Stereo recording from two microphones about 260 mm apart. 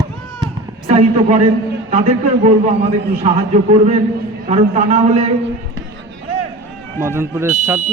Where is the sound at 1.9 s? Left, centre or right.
Right.